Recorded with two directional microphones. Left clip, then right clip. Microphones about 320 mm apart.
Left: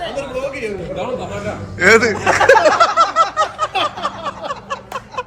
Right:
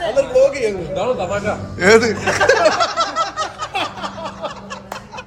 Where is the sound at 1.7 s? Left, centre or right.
Centre.